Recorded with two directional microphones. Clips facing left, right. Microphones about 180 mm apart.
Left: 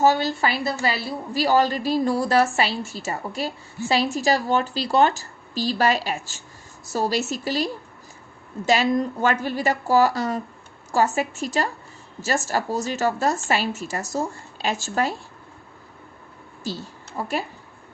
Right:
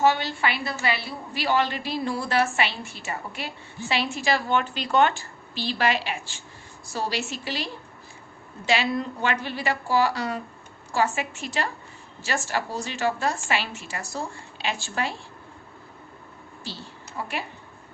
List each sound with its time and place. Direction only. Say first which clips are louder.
0.0 s a woman's voice: left 3 dB; 40° left (ahead or behind)
16.6 s a woman's voice: left 8 dB; 45° left (ahead or behind)